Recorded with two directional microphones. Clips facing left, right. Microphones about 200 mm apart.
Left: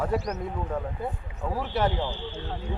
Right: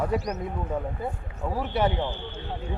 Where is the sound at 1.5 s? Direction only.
Centre (ahead or behind).